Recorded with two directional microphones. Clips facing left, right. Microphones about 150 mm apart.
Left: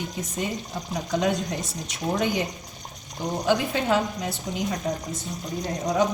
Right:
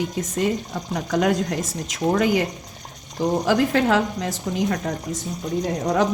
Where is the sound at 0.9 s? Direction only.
65° right (ahead or behind); by 4.8 s 85° right.